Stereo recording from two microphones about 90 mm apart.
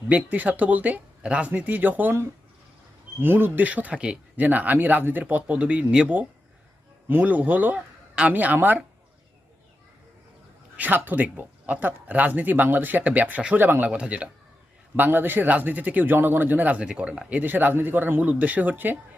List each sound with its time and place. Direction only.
0.1 s a man's voice: 15° right (ahead or behind)
10.8 s a man's voice: 20° right (ahead or behind)